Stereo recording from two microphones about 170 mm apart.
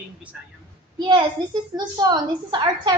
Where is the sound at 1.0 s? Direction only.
30° right (ahead or behind).